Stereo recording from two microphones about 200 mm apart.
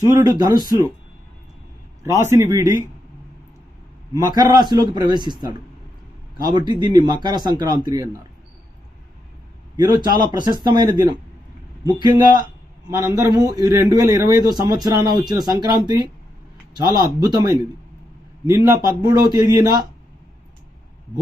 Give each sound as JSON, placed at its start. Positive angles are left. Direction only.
{"t": 0.0, "sound": "a man's voice", "side_deg": -15}
{"t": 2.3, "sound": "a man's voice", "side_deg": -15}
{"t": 4.4, "sound": "a man's voice", "side_deg": -20}
{"t": 9.7, "sound": "a man's voice", "side_deg": -20}
{"t": 17.0, "sound": "a man's voice", "side_deg": -20}